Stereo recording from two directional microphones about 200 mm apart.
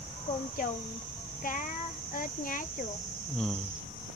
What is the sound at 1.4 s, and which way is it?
A child's voice, 40° left (ahead or behind).